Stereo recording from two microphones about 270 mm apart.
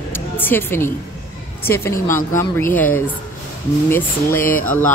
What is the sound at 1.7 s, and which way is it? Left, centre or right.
A woman's voice, centre.